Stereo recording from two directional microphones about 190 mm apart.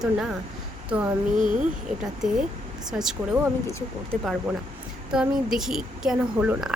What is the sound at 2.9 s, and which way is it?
Speech, centre (ahead or behind).